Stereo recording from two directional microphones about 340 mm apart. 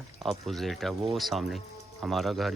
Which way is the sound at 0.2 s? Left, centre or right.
Centre.